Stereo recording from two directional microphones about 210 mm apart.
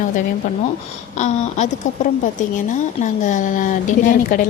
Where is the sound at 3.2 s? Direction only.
35° left (ahead or behind).